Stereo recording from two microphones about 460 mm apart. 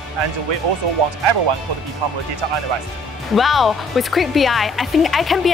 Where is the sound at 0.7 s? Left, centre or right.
Right.